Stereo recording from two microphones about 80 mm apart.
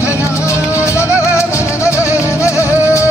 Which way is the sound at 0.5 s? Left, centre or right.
Left.